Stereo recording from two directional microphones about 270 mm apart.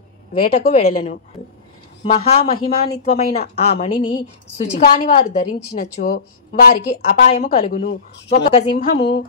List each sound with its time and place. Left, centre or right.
0.3 s a woman's voice: left